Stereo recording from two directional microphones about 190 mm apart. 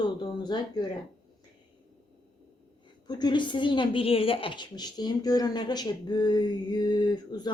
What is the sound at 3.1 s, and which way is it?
A woman's voice, 20° left (ahead or behind).